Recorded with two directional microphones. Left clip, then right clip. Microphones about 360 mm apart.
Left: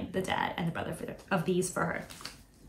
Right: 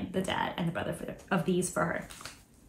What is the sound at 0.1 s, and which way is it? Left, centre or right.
A woman's voice, centre.